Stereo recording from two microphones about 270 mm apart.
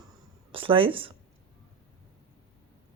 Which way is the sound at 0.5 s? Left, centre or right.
Centre.